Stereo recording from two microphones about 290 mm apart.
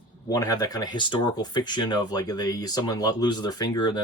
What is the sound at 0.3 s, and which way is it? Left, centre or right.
Speech, centre.